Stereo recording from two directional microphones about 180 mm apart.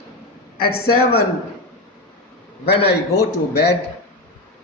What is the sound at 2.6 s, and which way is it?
Speech, 65° left (ahead or behind).